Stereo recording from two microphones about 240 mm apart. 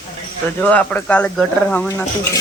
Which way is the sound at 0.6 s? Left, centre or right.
Centre.